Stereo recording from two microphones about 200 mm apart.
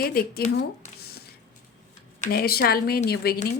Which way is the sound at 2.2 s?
50° left (ahead or behind).